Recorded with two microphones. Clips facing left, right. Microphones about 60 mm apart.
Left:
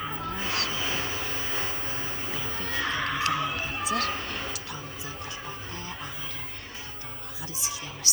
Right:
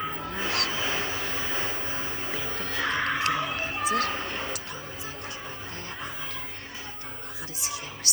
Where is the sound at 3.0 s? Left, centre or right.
Right.